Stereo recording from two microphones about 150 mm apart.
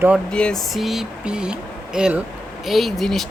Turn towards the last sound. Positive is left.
turn(degrees=0)  # may be behind; listen again after turning